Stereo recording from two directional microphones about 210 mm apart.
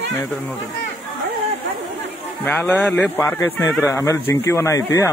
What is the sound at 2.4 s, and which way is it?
Speech, 10° left (ahead or behind).